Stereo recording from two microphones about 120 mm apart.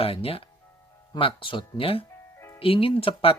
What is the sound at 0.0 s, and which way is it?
Speech, 55° left (ahead or behind).